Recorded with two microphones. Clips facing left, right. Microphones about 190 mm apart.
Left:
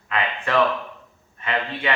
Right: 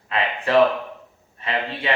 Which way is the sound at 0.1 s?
30° right (ahead or behind).